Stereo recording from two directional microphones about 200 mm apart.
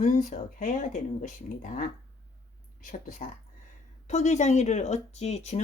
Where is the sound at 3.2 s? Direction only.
40° left (ahead or behind).